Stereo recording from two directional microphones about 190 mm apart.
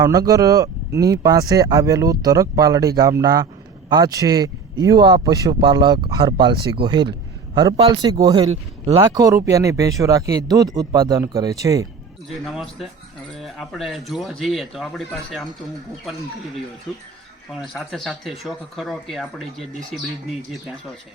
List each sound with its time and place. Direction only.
0.0 s speech: 20° right (ahead or behind)
12.5 s speech: centre (ahead or behind)